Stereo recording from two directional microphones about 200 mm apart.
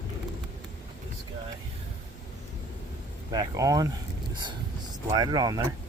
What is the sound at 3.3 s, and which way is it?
Speech, 20° right (ahead or behind).